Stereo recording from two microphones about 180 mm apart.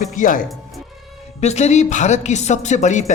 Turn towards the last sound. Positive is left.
turn(degrees=40)  # may be behind; listen again after turning